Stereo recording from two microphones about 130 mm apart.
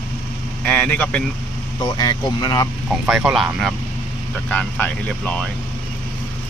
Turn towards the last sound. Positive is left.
turn(degrees=10)  # may be behind; listen again after turning